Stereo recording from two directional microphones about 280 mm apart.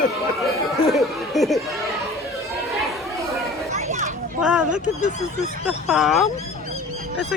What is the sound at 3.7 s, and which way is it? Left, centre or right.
Children playing, right.